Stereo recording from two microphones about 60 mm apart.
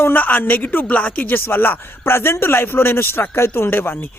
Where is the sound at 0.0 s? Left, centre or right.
Left.